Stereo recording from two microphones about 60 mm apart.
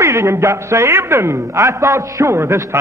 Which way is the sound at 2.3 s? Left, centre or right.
Right.